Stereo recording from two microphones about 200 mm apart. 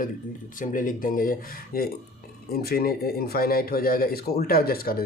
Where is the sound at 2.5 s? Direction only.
50° left (ahead or behind).